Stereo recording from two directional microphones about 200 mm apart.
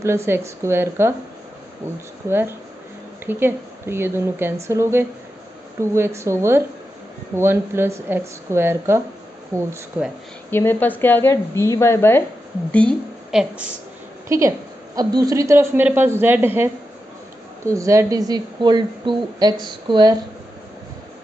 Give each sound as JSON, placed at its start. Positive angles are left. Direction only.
{"t": 0.0, "sound": "a woman's voice", "side_deg": -15}
{"t": 2.2, "sound": "a woman's voice", "side_deg": -10}
{"t": 10.5, "sound": "a woman's voice", "side_deg": 10}
{"t": 12.7, "sound": "a woman's voice", "side_deg": 0}
{"t": 14.3, "sound": "a woman's voice", "side_deg": -15}